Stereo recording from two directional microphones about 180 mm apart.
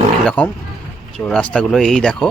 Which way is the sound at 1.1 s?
5° left (ahead or behind).